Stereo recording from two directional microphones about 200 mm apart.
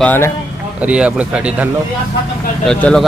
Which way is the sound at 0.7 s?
5° right (ahead or behind).